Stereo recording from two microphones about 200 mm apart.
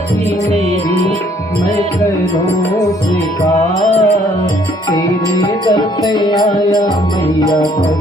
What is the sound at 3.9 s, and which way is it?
Music, 30° left (ahead or behind).